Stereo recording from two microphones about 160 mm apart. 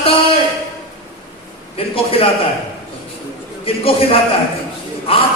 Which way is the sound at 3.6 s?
35° left (ahead or behind).